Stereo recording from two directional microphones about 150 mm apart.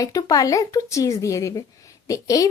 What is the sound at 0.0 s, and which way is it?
Speech, 25° left (ahead or behind).